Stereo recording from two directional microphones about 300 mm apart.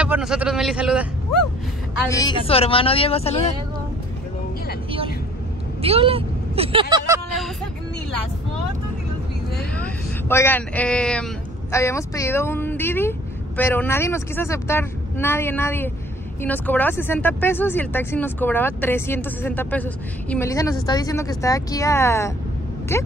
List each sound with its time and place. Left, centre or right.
0.0 s a man's voice: centre
2.0 s a woman's voice: centre
5.8 s speech: centre
9.8 s speech: centre